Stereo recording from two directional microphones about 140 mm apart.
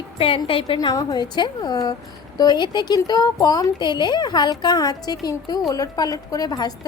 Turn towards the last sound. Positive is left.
turn(degrees=25)  # may be behind; listen again after turning